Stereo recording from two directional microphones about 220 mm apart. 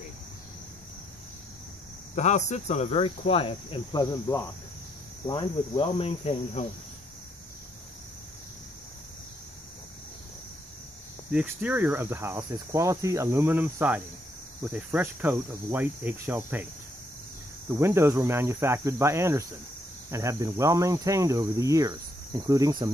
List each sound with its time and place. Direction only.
2.1 s cricket: 30° left (ahead or behind)
11.3 s speech: 10° right (ahead or behind)
17.6 s speech: 10° right (ahead or behind)